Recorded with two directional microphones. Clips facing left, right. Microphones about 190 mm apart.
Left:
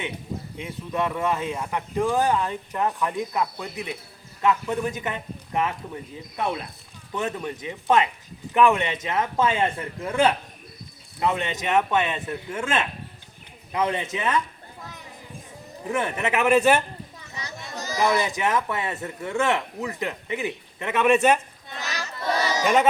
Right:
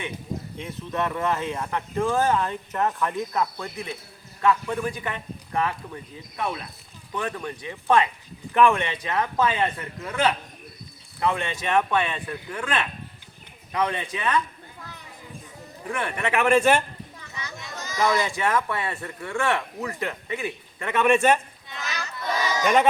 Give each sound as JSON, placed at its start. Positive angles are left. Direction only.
{"t": 0.6, "sound": "speech", "side_deg": 10}
{"t": 15.8, "sound": "speech", "side_deg": 25}
{"t": 16.4, "sound": "a man's voice", "side_deg": 5}
{"t": 17.3, "sound": "children playing", "side_deg": 35}
{"t": 18.0, "sound": "speech", "side_deg": 20}
{"t": 20.9, "sound": "a man's voice", "side_deg": 5}
{"t": 21.8, "sound": "crowd", "side_deg": 35}
{"t": 22.6, "sound": "a man's voice", "side_deg": 5}